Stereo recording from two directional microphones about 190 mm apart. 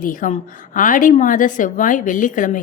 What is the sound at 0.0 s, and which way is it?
A woman's voice, 45° left (ahead or behind).